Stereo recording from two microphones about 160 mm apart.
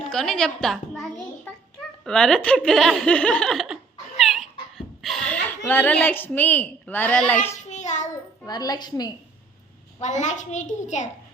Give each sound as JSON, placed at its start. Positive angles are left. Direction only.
{"t": 0.1, "sound": "a woman's voice", "side_deg": 5}
{"t": 2.0, "sound": "speech", "side_deg": 5}
{"t": 4.2, "sound": "a sound", "side_deg": 0}
{"t": 5.0, "sound": "a woman's voice", "side_deg": 5}
{"t": 7.6, "sound": "child singing", "side_deg": 50}
{"t": 8.4, "sound": "a woman's voice", "side_deg": 25}
{"t": 10.0, "sound": "a child's voice", "side_deg": 50}